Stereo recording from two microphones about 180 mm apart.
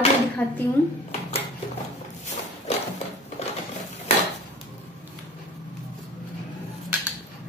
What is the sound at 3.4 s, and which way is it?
Sewing machine, 35° left (ahead or behind).